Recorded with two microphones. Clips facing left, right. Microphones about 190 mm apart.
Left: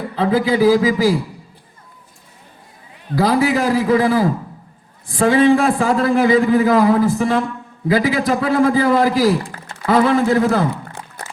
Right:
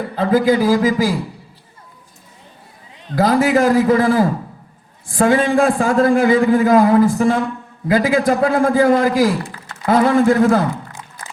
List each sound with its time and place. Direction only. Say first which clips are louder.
0.2 s a man's voice: right 1 dB; 50° right (ahead or behind)
3.2 s a man's voice: right 2 dB; 50° right (ahead or behind)
11.2 s a sound: left 3 dB; 65° left (ahead or behind)